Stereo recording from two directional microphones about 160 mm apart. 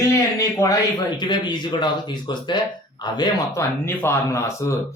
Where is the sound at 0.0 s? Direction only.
20° left (ahead or behind).